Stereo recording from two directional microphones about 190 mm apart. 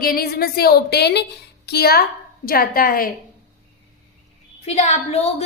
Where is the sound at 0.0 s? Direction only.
50° left (ahead or behind).